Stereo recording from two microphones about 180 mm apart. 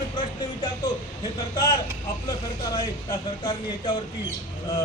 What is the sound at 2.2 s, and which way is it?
Speech, 20° left (ahead or behind).